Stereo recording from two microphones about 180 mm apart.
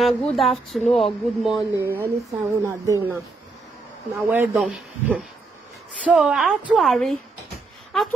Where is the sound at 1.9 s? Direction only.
15° right (ahead or behind); by 7.1 s centre (ahead or behind).